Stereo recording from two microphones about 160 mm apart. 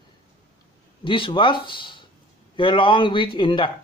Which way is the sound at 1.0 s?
30° left (ahead or behind).